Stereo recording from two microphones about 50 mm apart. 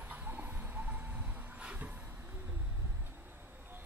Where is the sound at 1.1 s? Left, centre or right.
Centre.